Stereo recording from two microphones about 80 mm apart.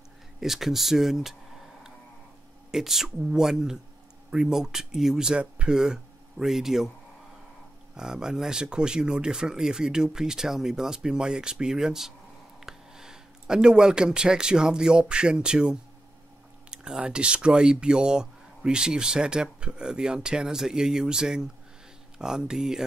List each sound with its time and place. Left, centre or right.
0.4 s speech: centre
2.7 s speech: centre
7.9 s speech: centre